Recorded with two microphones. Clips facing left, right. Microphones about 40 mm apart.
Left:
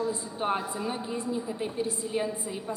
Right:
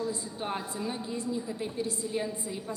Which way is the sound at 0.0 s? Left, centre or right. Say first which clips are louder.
Left 4 dB; centre.